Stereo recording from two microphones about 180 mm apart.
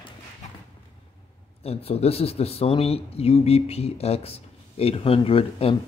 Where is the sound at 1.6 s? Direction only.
35° left (ahead or behind).